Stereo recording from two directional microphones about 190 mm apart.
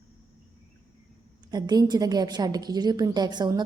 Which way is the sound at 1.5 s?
20° right (ahead or behind).